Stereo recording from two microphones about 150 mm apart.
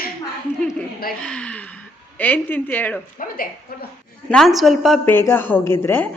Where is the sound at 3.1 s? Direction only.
70° left (ahead or behind).